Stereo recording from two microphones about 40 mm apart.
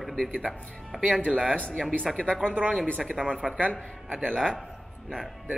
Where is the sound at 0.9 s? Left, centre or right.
Right.